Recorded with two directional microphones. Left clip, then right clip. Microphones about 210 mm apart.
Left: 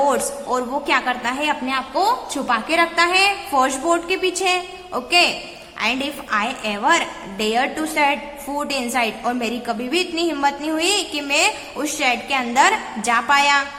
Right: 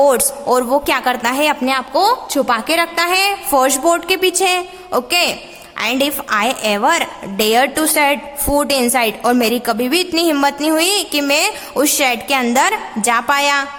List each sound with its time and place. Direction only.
0.0 s a woman's voice: 50° right (ahead or behind)